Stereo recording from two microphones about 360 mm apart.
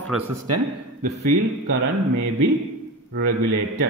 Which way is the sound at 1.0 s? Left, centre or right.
Right.